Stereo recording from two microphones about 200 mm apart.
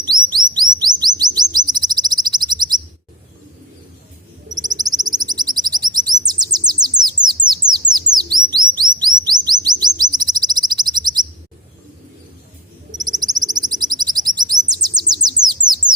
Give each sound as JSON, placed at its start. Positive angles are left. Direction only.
{"t": 0.0, "sound": "chirp", "side_deg": -20}
{"t": 4.5, "sound": "bird", "side_deg": -20}
{"t": 13.0, "sound": "bird", "side_deg": -20}